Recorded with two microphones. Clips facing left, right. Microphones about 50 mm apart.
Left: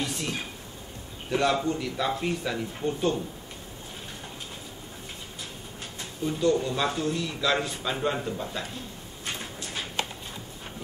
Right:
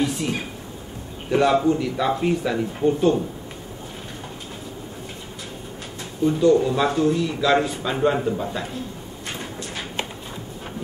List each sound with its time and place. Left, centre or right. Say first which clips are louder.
0.0 s a man's voice: right 7 dB; centre
6.2 s a man's voice: right 8 dB; centre